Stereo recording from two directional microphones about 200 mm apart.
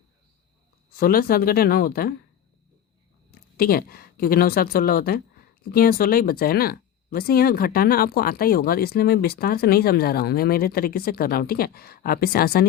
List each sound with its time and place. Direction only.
0.9 s speech: 50° left (ahead or behind)
3.6 s speech: 50° left (ahead or behind)